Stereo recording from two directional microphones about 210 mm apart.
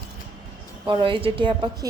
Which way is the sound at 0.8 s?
25° right (ahead or behind).